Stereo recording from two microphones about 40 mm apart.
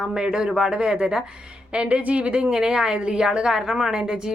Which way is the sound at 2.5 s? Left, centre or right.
Centre.